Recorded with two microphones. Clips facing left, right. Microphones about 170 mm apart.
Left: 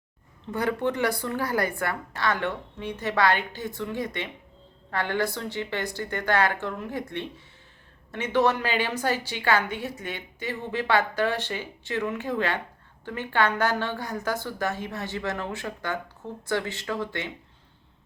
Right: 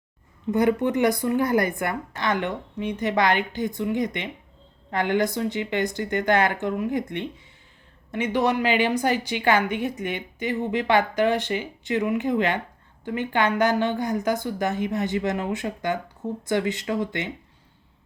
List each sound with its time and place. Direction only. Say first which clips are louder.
0.5 s a woman's voice: right 5 dB; 15° right (ahead or behind)